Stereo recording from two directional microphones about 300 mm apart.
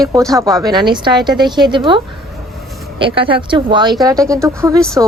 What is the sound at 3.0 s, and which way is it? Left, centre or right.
Speech, centre.